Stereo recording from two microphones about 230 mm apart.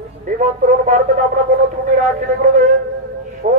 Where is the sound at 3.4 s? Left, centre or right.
Right.